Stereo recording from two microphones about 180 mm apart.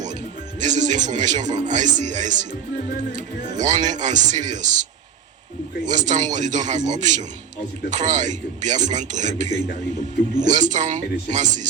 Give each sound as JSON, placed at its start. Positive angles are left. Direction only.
{"t": 0.6, "sound": "speech", "side_deg": -45}
{"t": 5.8, "sound": "speech", "side_deg": -45}